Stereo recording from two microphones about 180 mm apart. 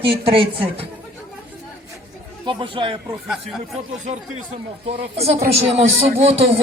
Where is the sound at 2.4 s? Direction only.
25° right (ahead or behind).